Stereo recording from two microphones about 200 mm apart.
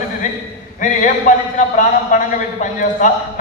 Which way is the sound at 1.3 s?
40° left (ahead or behind).